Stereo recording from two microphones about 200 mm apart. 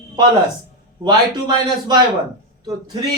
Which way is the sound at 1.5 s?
20° right (ahead or behind).